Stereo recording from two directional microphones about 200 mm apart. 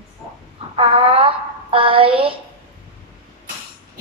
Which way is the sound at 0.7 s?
25° right (ahead or behind).